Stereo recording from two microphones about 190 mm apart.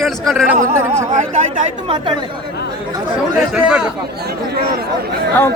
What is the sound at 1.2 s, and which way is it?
Speech, 40° right (ahead or behind).